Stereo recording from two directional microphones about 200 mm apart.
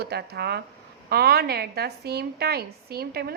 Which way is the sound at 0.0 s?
55° right (ahead or behind).